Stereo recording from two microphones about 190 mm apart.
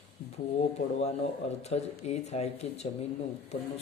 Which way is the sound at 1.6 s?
35° left (ahead or behind).